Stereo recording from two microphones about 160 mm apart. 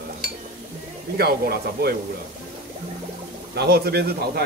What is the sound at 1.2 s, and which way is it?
Speech, 75° right (ahead or behind).